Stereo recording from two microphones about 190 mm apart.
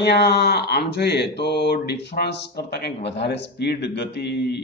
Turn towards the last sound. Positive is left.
turn(degrees=60)  # may be behind; listen again after turning